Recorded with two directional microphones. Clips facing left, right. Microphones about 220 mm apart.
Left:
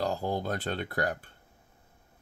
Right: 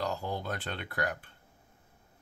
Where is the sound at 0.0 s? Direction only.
35° left (ahead or behind).